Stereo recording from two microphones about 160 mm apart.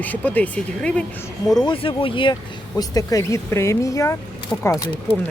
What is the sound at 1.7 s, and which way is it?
Speech, 35° left (ahead or behind).